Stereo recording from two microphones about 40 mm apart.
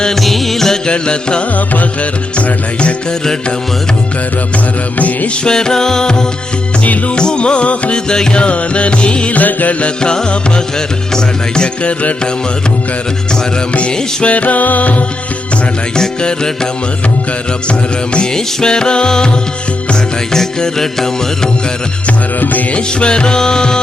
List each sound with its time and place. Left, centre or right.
0.2 s music: centre
0.9 s music: left
1.5 s music: left
4.9 s music: left
5.5 s music: centre
7.9 s music: centre
9.4 s music: left
9.8 s music: left
14.3 s music: left
16.0 s music: centre
17.7 s music: left
20.3 s music: centre
22.7 s music: left